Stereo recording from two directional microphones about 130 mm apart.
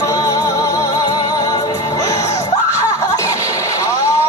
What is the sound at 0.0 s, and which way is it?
Music, 25° left (ahead or behind).